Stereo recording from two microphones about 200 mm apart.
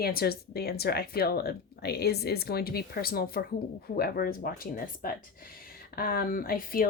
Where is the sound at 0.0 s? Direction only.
50° left (ahead or behind).